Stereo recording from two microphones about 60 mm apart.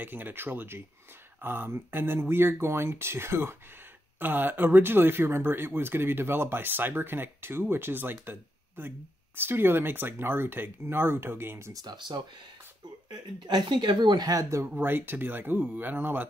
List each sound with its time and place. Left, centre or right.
0.0 s speech: right
14.2 s speech: right
14.8 s speech: right